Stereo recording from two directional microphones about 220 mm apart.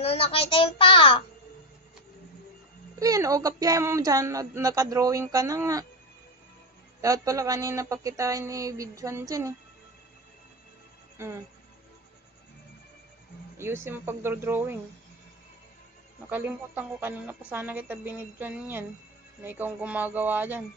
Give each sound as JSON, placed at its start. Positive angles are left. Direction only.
{"t": 0.0, "sound": "a child's voice", "side_deg": 25}
{"t": 3.0, "sound": "speech", "side_deg": -15}
{"t": 7.0, "sound": "speech", "side_deg": -15}
{"t": 13.6, "sound": "speech", "side_deg": -10}
{"t": 16.3, "sound": "speech", "side_deg": -10}